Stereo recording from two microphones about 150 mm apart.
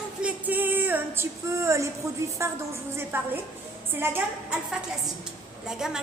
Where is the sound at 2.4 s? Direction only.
20° right (ahead or behind).